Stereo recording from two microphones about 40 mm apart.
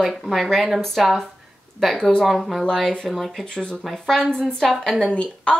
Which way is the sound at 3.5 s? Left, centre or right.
Left.